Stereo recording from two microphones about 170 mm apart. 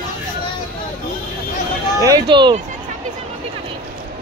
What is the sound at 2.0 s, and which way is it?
Speech, 25° right (ahead or behind).